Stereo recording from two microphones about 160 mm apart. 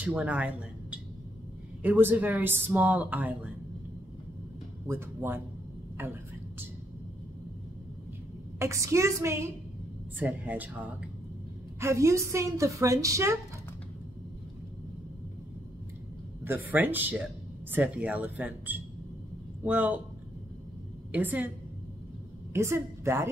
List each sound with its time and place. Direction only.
0.0 s speech: 10° right (ahead or behind)
4.8 s speech: 15° right (ahead or behind)
8.5 s a woman's voice: 20° right (ahead or behind)
16.4 s speech: 10° right (ahead or behind)
21.1 s speech: 10° right (ahead or behind)
22.5 s a woman's voice: 15° right (ahead or behind)